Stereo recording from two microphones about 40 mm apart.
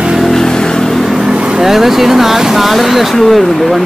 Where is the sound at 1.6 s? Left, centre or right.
Centre.